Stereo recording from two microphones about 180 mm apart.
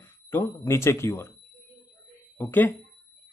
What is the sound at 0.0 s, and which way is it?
Speech, 10° left (ahead or behind).